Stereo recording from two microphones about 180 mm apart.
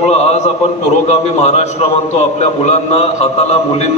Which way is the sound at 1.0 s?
35° left (ahead or behind).